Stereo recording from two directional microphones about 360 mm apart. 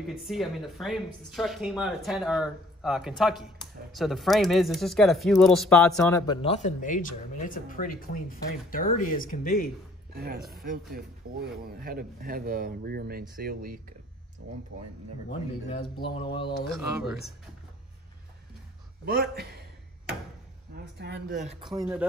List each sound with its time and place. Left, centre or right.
0.0 s a woman's voice: centre; by 9.7 s left
10.1 s speech: right
15.2 s speech: centre
16.7 s a woman's voice: centre
19.0 s speech: right
20.7 s speech: right
21.6 s a woman's voice: centre